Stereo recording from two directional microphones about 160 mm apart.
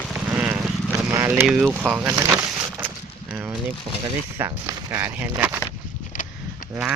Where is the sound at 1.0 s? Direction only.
15° right (ahead or behind).